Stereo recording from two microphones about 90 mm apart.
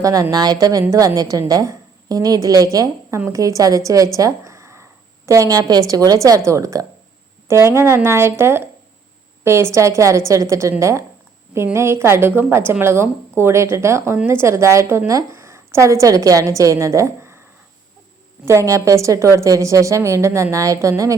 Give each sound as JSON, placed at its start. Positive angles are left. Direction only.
{"t": 0.0, "sound": "a woman's voice", "side_deg": -40}
{"t": 18.4, "sound": "a woman's voice", "side_deg": -35}